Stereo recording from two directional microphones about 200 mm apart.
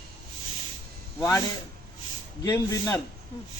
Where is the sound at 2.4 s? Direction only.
15° left (ahead or behind).